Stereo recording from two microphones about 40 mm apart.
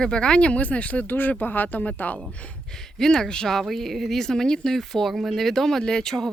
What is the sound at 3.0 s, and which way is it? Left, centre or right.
Speech, centre.